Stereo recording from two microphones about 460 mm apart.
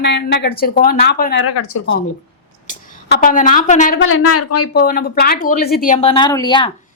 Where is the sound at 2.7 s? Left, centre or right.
Centre.